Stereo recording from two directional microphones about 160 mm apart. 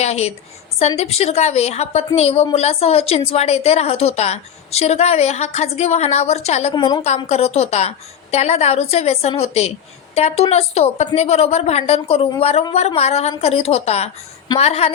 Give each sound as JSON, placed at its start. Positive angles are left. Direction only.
{"t": 0.0, "sound": "a woman's voice", "side_deg": 40}
{"t": 6.7, "sound": "a woman's voice", "side_deg": 25}
{"t": 7.3, "sound": "a woman's voice", "side_deg": 40}